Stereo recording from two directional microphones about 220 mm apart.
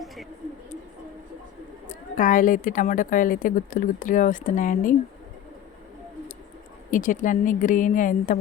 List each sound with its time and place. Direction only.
1.9 s a woman's voice: 35° left (ahead or behind)
6.9 s a woman's voice: 35° left (ahead or behind)